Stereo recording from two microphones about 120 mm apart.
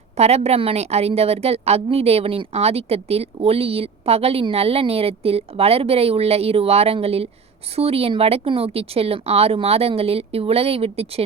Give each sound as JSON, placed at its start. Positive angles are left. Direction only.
{"t": 0.2, "sound": "a woman's voice", "side_deg": -60}